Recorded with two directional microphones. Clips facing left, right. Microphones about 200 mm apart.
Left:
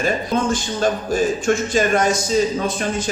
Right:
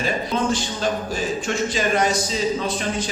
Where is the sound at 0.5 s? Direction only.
50° left (ahead or behind).